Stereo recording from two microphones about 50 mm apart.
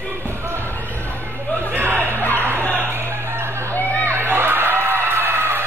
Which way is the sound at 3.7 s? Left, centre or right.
Left.